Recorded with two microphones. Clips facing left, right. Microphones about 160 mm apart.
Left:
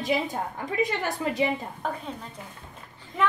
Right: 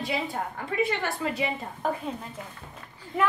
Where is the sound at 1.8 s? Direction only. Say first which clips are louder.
Right 3 dB; 5° right (ahead or behind).